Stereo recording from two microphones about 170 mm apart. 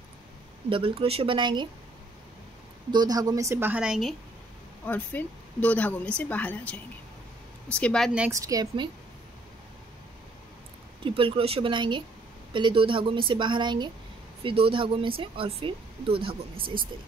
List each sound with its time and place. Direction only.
0.7 s speech: 30° right (ahead or behind)
2.9 s a woman's voice: 25° right (ahead or behind); by 4.1 s 5° right (ahead or behind)
4.8 s a woman's voice: 10° left (ahead or behind)
8.3 s a woman's voice: 20° right (ahead or behind)
11.1 s a woman's voice: 30° right (ahead or behind)